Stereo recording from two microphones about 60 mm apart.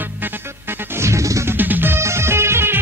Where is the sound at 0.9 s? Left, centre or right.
Right.